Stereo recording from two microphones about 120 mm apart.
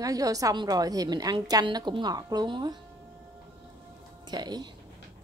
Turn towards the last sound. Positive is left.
turn(degrees=-35)  # may be behind; listen again after turning